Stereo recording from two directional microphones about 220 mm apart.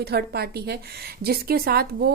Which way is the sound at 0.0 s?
45° right (ahead or behind).